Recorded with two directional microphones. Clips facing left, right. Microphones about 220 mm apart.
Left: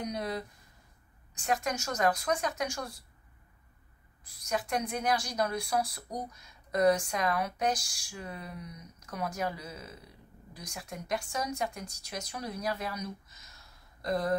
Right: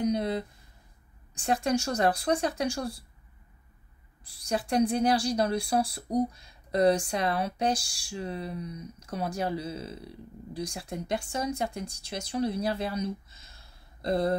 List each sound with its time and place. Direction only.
0.0 s a sound: 25° right (ahead or behind)
1.3 s a woman's voice: 30° right (ahead or behind)
4.2 s a woman's voice: 30° right (ahead or behind)